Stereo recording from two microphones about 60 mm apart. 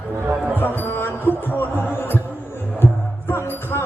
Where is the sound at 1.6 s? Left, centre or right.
Left.